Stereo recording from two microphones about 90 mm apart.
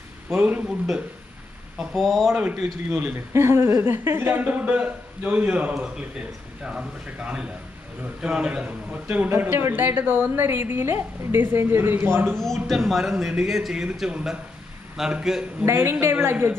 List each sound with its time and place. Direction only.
0.3 s a man's voice: 15° right (ahead or behind)
1.8 s a man's voice: centre (ahead or behind)
2.3 s a man's voice: 15° right (ahead or behind)
2.9 s a man's voice: 25° right (ahead or behind)
12.6 s a man's voice: centre (ahead or behind)
15.6 s a man's voice: 30° right (ahead or behind)